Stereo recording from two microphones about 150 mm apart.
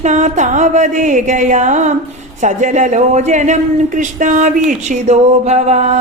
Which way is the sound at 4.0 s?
60° right (ahead or behind).